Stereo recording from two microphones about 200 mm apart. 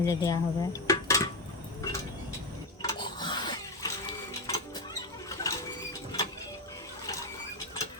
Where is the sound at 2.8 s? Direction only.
20° left (ahead or behind).